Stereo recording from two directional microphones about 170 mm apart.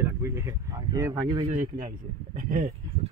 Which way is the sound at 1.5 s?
50° right (ahead or behind).